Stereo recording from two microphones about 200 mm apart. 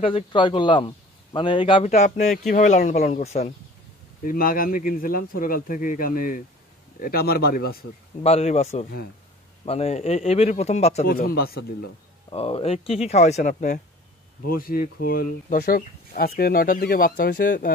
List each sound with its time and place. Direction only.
0.0 s a man's voice: 25° left (ahead or behind)
1.9 s speech: 40° left (ahead or behind)
4.2 s speech: 45° left (ahead or behind)
8.2 s speech: 30° left (ahead or behind)
9.7 s speech: 30° left (ahead or behind)
11.1 s speech: 50° left (ahead or behind)
12.3 s speech: 25° left (ahead or behind); by 17.7 s 45° left (ahead or behind)